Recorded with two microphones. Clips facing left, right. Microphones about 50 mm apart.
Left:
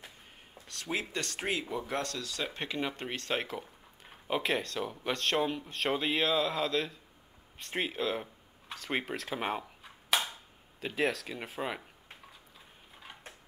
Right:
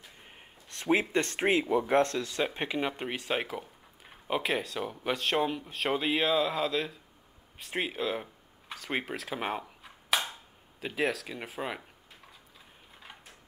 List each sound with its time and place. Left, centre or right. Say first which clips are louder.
0.3 s speech: even; right
2.4 s speech: right 3 dB; centre